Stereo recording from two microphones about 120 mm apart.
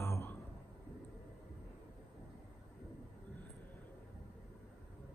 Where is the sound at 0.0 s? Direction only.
20° left (ahead or behind).